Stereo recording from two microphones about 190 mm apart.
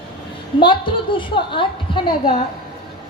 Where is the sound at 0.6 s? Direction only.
25° left (ahead or behind).